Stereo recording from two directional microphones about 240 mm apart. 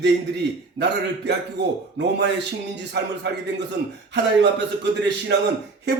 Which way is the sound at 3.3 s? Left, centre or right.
Right.